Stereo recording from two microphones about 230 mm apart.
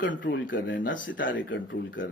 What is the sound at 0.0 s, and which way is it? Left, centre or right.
Speech, left.